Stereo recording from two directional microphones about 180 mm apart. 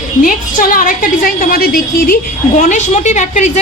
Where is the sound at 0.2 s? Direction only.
50° left (ahead or behind).